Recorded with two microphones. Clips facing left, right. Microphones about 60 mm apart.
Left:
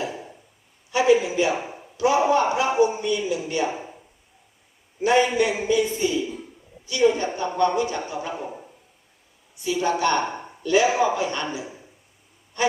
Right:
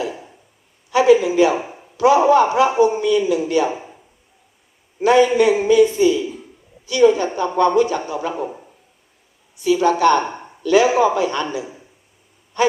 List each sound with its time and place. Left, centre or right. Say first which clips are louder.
0.9 s a man's voice: right 5 dB; right
2.0 s a man's voice: right 6 dB; right
5.0 s a man's voice: right 6 dB; right
7.3 s a man's voice: right 6 dB; right
9.6 s a man's voice: right 8 dB; right